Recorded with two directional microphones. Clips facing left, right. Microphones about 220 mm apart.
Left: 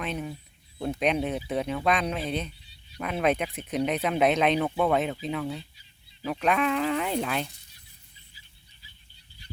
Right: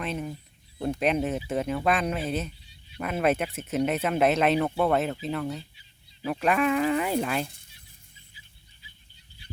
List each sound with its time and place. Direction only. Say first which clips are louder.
0.0 s speech: right 1 dB; centre (ahead or behind)